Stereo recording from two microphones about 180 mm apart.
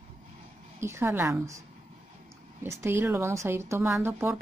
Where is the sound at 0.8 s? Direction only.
15° right (ahead or behind).